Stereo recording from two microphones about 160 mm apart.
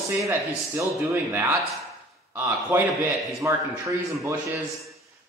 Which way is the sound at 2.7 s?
10° right (ahead or behind).